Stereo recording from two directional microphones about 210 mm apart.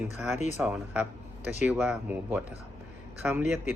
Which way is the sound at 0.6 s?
Centre (ahead or behind).